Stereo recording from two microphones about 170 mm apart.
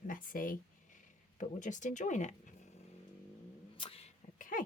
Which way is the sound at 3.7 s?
30° left (ahead or behind).